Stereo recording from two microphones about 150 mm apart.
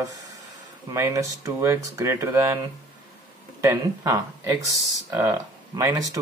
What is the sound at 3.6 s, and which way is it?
Speech, 20° right (ahead or behind).